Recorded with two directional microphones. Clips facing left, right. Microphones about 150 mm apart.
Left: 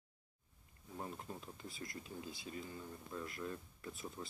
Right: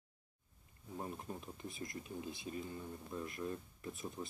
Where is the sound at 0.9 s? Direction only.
15° right (ahead or behind).